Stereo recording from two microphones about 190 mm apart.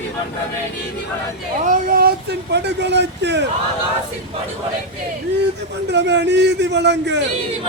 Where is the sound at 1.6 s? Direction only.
45° right (ahead or behind); by 3.4 s 65° right (ahead or behind).